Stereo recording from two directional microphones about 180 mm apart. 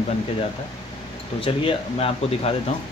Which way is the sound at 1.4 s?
30° left (ahead or behind).